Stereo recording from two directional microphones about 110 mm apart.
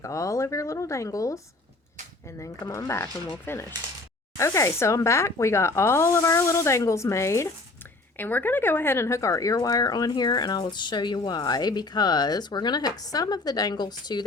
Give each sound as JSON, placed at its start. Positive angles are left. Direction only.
{"t": 0.0, "sound": "speech", "side_deg": 30}